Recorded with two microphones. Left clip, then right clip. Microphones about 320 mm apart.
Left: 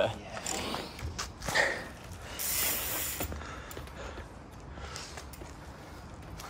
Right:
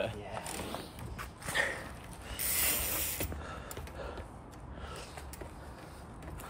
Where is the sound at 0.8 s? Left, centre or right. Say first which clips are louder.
Left 5 dB; centre.